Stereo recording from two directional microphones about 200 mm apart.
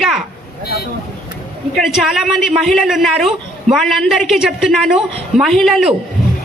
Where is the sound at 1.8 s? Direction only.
Centre (ahead or behind).